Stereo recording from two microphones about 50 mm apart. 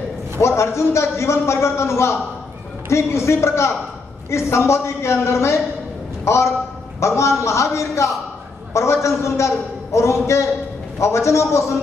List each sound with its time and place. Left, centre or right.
0.4 s a man's voice: left
6.2 s a man's voice: left